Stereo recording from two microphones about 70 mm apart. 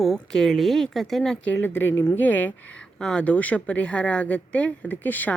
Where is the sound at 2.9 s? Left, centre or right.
Centre.